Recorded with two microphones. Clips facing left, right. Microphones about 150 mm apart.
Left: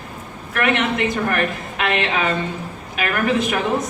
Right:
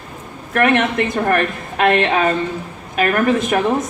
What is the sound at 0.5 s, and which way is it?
A woman's voice, 50° right (ahead or behind).